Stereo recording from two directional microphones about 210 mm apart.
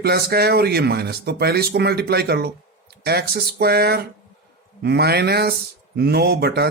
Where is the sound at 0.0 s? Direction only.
50° right (ahead or behind).